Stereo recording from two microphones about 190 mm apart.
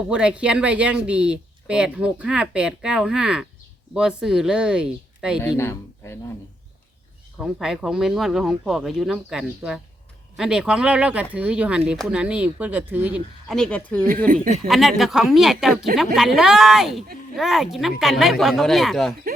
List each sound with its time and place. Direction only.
0.1 s speech: 5° right (ahead or behind)
5.4 s a man's voice: 15° left (ahead or behind)
7.3 s speech: 5° right (ahead or behind)
13.6 s a man's voice: 5° left (ahead or behind)
14.4 s speech: 35° right (ahead or behind)
14.7 s speech: centre (ahead or behind)